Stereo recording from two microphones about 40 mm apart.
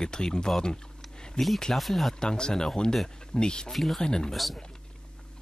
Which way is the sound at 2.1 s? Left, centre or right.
Left.